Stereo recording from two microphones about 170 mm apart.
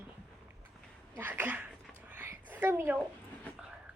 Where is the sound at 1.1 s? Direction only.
10° right (ahead or behind).